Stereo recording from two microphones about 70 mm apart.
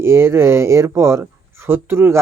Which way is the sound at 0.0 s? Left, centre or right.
Right.